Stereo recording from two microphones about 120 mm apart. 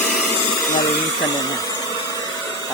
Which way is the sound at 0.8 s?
30° left (ahead or behind).